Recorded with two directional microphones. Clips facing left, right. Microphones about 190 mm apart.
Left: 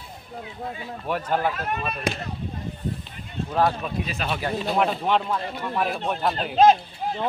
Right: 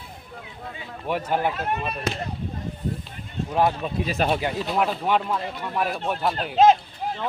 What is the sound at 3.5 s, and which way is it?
Speech, 15° right (ahead or behind).